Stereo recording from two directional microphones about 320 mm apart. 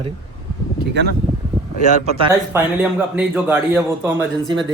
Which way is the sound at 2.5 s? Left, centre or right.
Centre.